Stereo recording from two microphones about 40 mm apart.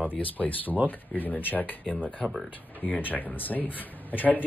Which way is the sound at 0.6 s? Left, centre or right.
Right.